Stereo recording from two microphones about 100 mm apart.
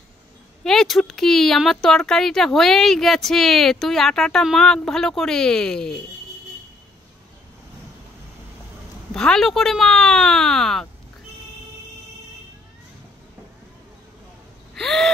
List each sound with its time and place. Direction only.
0.7 s speech: 5° left (ahead or behind)
9.1 s speech: 5° left (ahead or behind)
14.8 s speech: 5° left (ahead or behind)